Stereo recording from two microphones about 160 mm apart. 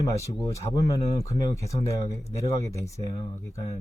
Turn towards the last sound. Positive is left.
turn(degrees=20)  # may be behind; listen again after turning